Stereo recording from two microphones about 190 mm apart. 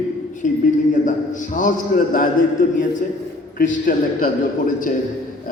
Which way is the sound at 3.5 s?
45° left (ahead or behind).